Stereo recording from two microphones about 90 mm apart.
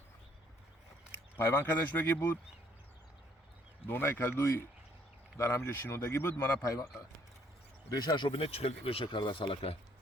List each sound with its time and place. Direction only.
1.4 s speech: 25° left (ahead or behind)
3.8 s speech: 25° left (ahead or behind)
8.0 s speech: 60° left (ahead or behind); by 9.7 s 85° left